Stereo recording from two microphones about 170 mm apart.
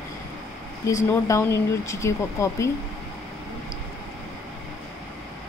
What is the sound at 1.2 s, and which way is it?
Speech, 15° left (ahead or behind).